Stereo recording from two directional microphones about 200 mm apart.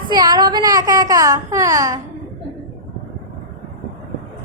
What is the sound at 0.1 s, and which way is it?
Speech, 20° right (ahead or behind).